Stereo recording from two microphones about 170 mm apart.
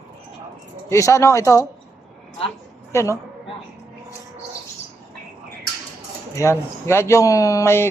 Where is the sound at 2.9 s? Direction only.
15° left (ahead or behind).